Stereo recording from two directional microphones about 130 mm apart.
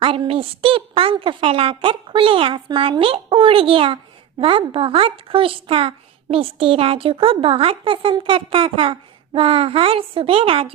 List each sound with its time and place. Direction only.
0.0 s a woman's voice: 40° right (ahead or behind)